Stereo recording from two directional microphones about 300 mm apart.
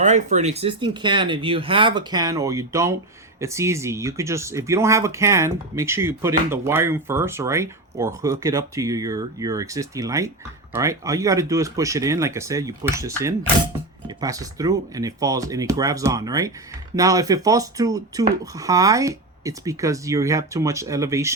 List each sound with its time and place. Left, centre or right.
0.0 s speech: right